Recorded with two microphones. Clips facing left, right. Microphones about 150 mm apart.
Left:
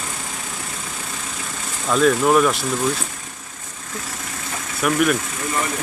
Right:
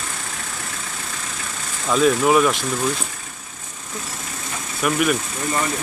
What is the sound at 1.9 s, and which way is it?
Speech, centre (ahead or behind).